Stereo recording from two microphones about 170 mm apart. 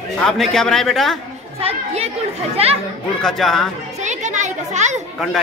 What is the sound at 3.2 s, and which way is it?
Speech, centre (ahead or behind).